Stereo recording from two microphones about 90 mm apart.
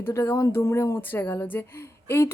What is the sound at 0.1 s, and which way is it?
A woman's voice, 35° left (ahead or behind).